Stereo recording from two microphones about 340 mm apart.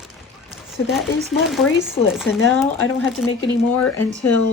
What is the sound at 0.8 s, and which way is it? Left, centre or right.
Speech, left.